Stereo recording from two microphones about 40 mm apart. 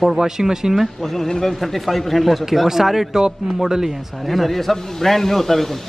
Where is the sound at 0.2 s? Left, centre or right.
Centre.